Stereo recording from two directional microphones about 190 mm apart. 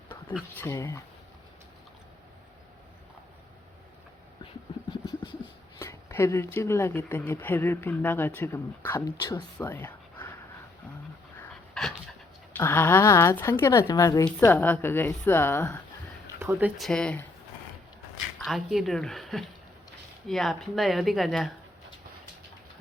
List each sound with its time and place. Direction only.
0.5 s speech: 15° left (ahead or behind)
4.9 s a sound: 25° left (ahead or behind)
5.8 s speech: 15° left (ahead or behind)
9.6 s a sound: 10° left (ahead or behind)
11.3 s dog: 5° left (ahead or behind)
12.5 s speech: 10° left (ahead or behind)
16.4 s speech: 10° right (ahead or behind)
18.3 s speech: centre (ahead or behind)